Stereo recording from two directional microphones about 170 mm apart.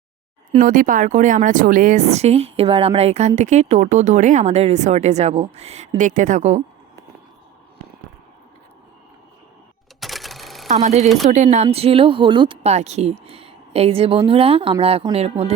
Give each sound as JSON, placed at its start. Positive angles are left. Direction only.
{"t": 0.6, "sound": "a woman's voice", "side_deg": -50}
{"t": 10.0, "sound": "cash register", "side_deg": 0}
{"t": 10.8, "sound": "a woman's voice", "side_deg": -40}